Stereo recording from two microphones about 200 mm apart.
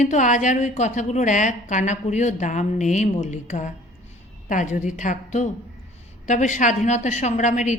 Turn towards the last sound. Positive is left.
turn(degrees=35)  # may be behind; listen again after turning